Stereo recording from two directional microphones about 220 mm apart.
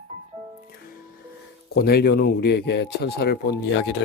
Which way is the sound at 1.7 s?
45° left (ahead or behind).